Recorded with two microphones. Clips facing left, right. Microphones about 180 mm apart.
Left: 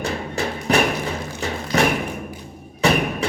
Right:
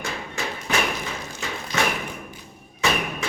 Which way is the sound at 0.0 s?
35° left (ahead or behind).